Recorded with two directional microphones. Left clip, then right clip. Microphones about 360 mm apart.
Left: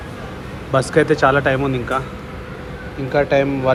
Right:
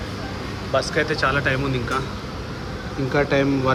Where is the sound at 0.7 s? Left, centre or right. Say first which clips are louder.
Left 6 dB; centre.